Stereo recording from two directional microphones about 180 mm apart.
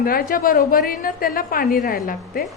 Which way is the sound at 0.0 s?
55° left (ahead or behind).